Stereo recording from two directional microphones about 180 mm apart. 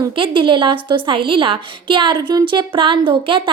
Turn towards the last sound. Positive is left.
turn(degrees=-30)  # may be behind; listen again after turning